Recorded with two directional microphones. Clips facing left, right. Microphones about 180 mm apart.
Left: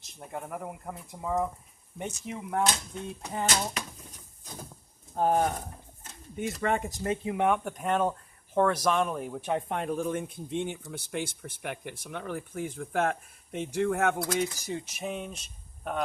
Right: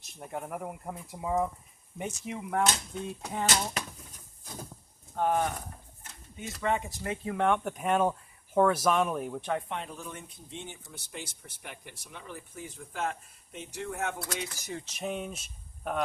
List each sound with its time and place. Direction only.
0.2 s speech: centre (ahead or behind)
5.1 s speech: 40° left (ahead or behind)
6.3 s speech: 55° left (ahead or behind)
7.3 s speech: 15° left (ahead or behind)
7.5 s speech: centre (ahead or behind)
9.6 s speech: 50° left (ahead or behind)
14.8 s speech: 10° left (ahead or behind)
15.0 s speech: centre (ahead or behind)